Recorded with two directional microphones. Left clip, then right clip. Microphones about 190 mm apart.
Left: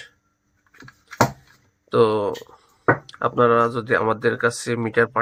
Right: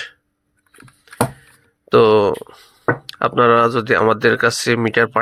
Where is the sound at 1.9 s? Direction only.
20° right (ahead or behind).